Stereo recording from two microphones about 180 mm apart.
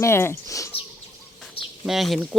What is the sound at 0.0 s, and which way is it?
Speech, 15° left (ahead or behind).